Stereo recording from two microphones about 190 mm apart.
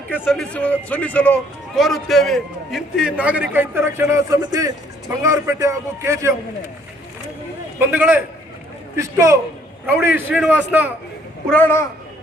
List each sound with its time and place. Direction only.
0.3 s speech: 5° left (ahead or behind); by 6.3 s 15° right (ahead or behind)
7.8 s speech: 10° right (ahead or behind)
11.4 s speech: 10° left (ahead or behind)